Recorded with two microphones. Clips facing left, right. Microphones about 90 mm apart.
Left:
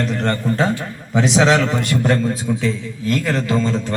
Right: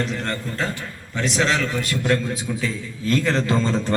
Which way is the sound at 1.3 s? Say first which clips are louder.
Left 6 dB; 85° left.